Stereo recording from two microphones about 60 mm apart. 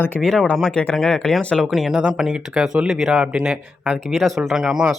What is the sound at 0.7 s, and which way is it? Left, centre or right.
Speech, centre.